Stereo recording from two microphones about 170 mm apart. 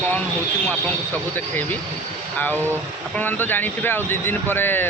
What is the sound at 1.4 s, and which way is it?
Speech, 10° left (ahead or behind).